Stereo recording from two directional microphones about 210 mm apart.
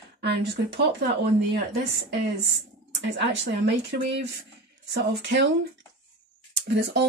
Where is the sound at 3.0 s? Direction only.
55° right (ahead or behind).